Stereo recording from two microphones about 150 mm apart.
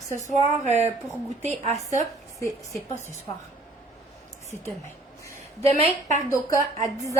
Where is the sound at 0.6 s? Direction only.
50° right (ahead or behind).